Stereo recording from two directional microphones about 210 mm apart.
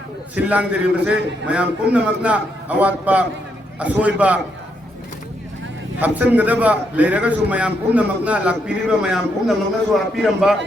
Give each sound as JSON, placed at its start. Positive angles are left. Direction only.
{"t": 0.3, "sound": "a man's voice", "side_deg": -5}
{"t": 6.0, "sound": "a man's voice", "side_deg": -5}